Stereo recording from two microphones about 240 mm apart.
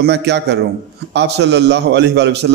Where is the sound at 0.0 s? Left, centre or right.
Right.